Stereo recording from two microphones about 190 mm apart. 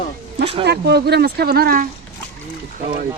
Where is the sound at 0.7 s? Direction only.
60° right (ahead or behind).